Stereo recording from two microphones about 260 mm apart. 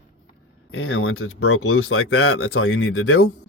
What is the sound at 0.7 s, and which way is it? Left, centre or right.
Speech, left.